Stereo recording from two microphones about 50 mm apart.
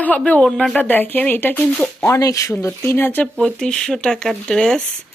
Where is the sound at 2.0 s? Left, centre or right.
Left.